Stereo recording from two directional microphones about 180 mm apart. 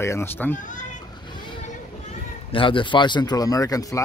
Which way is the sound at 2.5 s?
30° left (ahead or behind).